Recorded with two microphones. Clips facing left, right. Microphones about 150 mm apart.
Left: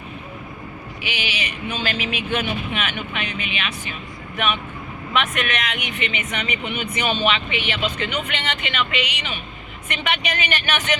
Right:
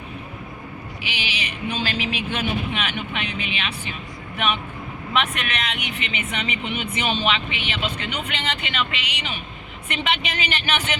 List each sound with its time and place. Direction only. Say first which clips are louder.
1.0 s speech: left 3 dB; 30° right (ahead or behind)
5.1 s speech: left 2 dB; 30° right (ahead or behind)